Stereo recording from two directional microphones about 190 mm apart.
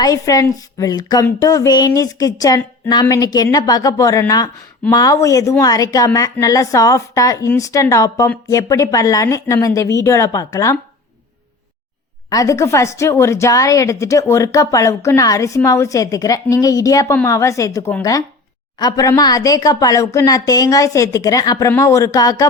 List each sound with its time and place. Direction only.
0.0 s a woman's voice: 20° left (ahead or behind)
12.3 s a woman's voice: 15° left (ahead or behind)